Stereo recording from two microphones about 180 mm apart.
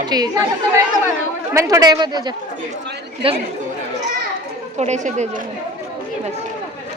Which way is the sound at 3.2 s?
30° right (ahead or behind).